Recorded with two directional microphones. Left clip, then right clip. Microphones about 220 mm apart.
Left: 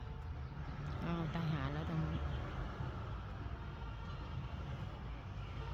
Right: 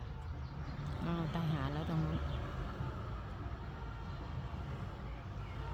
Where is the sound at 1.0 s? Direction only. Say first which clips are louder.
Right 2 dB; 10° right (ahead or behind).